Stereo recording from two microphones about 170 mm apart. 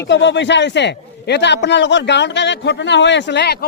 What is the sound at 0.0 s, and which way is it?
Speech, 90° left.